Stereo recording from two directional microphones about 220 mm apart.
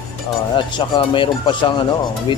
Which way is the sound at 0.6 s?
20° left (ahead or behind).